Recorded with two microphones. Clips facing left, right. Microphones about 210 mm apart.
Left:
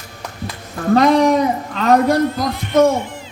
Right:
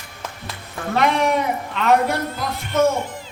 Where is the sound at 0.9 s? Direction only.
35° left (ahead or behind).